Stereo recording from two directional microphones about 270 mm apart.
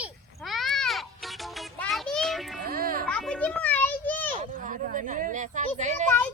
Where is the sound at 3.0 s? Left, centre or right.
Centre.